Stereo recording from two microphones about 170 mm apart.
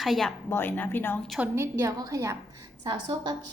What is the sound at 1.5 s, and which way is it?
A woman's voice, 15° right (ahead or behind).